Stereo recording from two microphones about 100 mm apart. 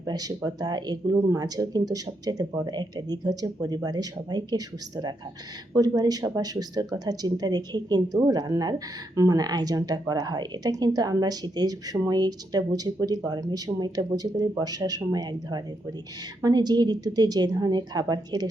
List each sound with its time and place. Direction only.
0.0 s speech: 40° right (ahead or behind)
1.1 s speech: 30° right (ahead or behind)
1.5 s a woman's voice: 40° right (ahead or behind)